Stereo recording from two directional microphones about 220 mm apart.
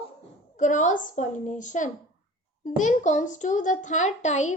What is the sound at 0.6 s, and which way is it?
A child's voice, 35° left (ahead or behind).